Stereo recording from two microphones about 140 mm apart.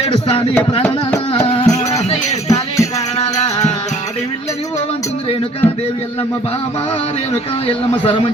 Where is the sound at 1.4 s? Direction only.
40° left (ahead or behind).